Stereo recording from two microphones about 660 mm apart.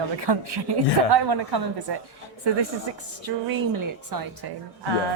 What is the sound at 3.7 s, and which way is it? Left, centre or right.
Speech, right.